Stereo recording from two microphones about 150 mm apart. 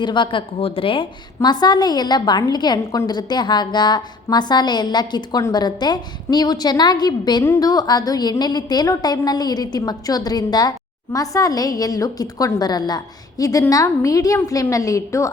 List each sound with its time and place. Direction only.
0.0 s a woman's voice: 30° left (ahead or behind)